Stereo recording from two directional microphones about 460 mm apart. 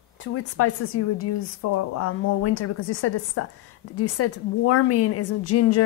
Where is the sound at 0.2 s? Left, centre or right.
Left.